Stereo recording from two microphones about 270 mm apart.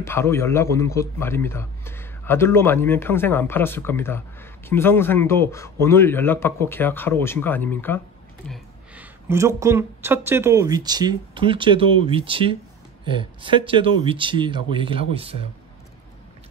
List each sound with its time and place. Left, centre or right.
0.0 s a man's voice: centre
8.5 s speech: centre; by 15.4 s right